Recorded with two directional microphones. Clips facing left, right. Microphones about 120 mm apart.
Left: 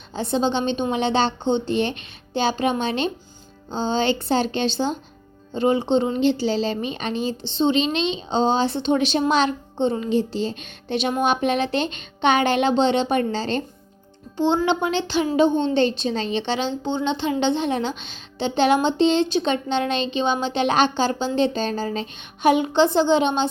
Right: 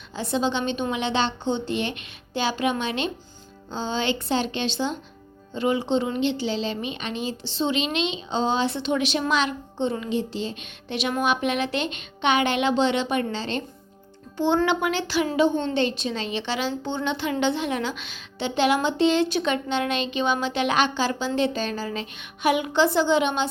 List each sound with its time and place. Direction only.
0.1 s a woman's voice: 30° left (ahead or behind)
14.3 s a woman's voice: 20° left (ahead or behind)